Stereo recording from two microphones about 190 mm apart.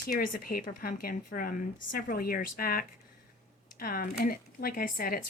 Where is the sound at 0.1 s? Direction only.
50° left (ahead or behind).